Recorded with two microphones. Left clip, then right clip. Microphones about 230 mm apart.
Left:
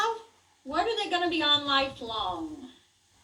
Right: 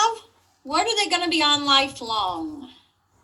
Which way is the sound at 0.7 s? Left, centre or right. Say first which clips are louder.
Right 6 dB; right.